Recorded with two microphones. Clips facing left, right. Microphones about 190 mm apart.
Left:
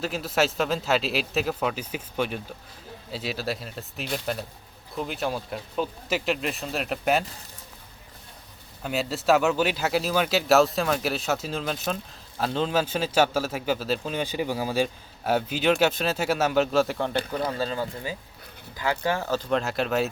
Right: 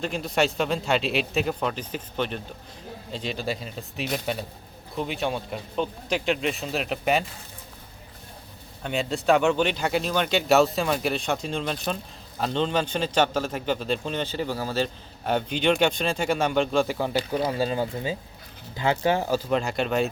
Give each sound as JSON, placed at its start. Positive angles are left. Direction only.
{"t": 0.0, "sound": "speech", "side_deg": 5}
{"t": 8.8, "sound": "speech", "side_deg": 5}
{"t": 17.5, "sound": "speech", "side_deg": -15}
{"t": 19.5, "sound": "speech", "side_deg": 0}